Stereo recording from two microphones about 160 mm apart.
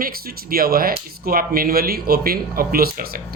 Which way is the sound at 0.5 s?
70° right (ahead or behind).